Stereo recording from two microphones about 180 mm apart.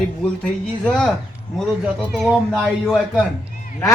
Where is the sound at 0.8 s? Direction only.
5° left (ahead or behind).